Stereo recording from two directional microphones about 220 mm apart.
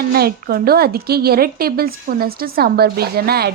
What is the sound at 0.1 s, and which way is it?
A woman's voice, 45° right (ahead or behind).